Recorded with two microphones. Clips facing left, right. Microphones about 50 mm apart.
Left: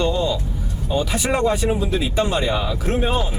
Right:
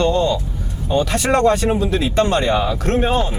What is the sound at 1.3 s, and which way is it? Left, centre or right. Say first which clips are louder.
Speech: right 5 dB; centre.